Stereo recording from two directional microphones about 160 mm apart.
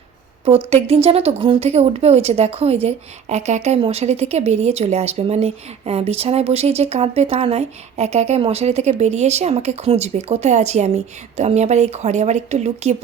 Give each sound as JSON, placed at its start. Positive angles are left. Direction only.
{"t": 0.4, "sound": "speech", "side_deg": -40}